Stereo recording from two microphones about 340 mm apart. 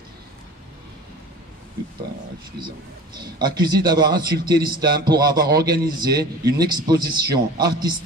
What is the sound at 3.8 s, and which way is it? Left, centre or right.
Speech, centre.